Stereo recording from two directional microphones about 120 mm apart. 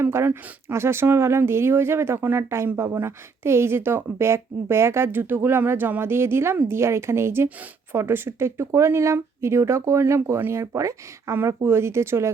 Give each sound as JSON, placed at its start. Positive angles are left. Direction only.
{"t": 0.0, "sound": "speech", "side_deg": -20}